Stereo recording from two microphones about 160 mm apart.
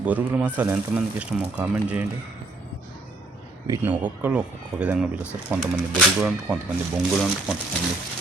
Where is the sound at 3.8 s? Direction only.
10° right (ahead or behind).